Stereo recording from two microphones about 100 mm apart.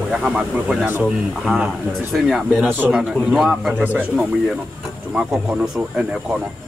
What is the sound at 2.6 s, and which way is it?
Speech, 20° right (ahead or behind).